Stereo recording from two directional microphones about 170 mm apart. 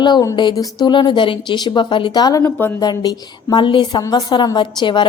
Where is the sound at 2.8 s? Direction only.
25° left (ahead or behind).